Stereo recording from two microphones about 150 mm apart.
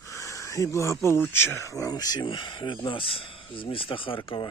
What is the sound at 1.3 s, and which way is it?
Speech, 15° left (ahead or behind).